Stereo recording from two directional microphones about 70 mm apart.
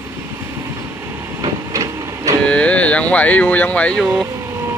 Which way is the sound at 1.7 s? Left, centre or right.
Right.